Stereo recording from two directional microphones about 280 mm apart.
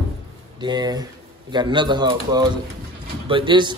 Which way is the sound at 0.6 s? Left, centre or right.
Centre.